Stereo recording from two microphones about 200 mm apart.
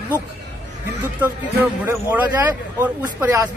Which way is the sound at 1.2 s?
10° right (ahead or behind).